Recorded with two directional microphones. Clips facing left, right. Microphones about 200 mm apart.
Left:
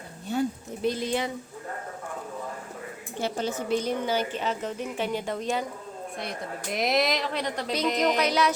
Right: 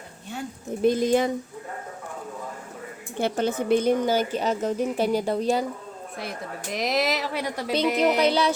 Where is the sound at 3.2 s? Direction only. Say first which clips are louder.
Right 5 dB; 60° right (ahead or behind); by 5.6 s 35° right (ahead or behind).